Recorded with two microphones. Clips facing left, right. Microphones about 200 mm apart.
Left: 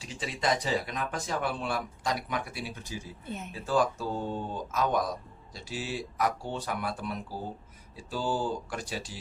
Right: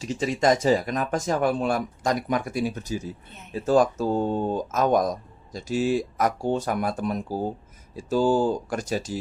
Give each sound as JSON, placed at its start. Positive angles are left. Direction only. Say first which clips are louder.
{"t": 0.0, "sound": "speech", "louder": "right 9 dB", "side_deg": -45}